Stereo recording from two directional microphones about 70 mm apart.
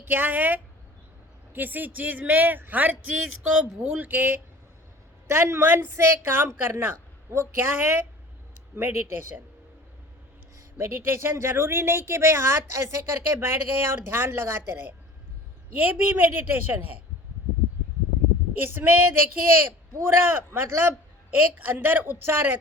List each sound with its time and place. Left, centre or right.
0.0 s speech: right
10.8 s speech: right
18.5 s speech: right